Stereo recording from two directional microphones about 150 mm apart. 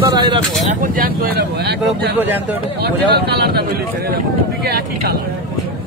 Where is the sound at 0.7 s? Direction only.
75° right (ahead or behind).